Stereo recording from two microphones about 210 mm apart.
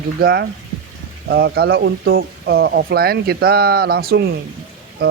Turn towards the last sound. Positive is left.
turn(degrees=-45)  # may be behind; listen again after turning